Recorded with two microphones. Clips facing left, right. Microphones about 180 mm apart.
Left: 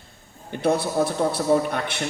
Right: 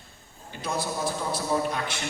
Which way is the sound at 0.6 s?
60° left (ahead or behind).